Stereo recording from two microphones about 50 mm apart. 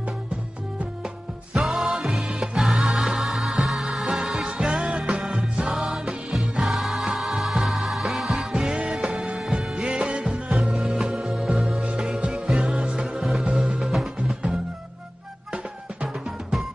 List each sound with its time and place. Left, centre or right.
1.5 s music: centre
9.8 s music: centre
13.2 s music: centre